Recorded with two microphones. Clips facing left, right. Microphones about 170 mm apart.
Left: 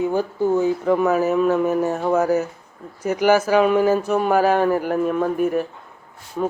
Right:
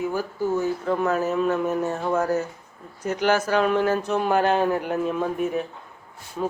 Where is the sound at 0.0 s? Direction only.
25° left (ahead or behind).